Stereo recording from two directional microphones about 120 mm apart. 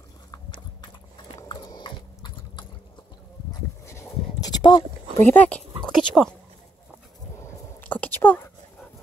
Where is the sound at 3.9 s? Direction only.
25° left (ahead or behind).